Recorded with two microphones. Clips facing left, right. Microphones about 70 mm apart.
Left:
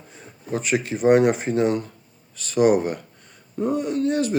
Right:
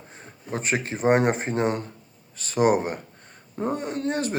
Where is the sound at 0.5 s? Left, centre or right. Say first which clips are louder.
Left 3 dB; right.